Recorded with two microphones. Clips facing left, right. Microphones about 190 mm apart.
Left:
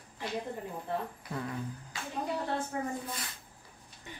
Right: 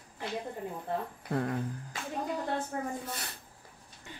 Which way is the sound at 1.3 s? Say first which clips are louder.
Right 7 dB; 55° right (ahead or behind).